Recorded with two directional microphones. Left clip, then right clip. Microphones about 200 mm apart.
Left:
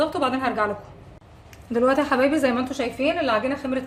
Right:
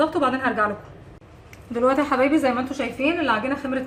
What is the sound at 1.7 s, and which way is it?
A woman's voice, 45° left (ahead or behind).